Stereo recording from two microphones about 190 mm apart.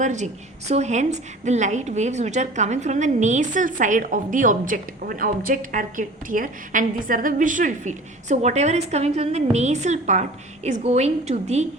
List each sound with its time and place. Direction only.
0.0 s a woman's voice: 40° right (ahead or behind)